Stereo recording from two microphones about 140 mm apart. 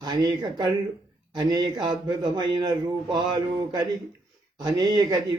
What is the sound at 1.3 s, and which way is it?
A man's voice, 30° right (ahead or behind).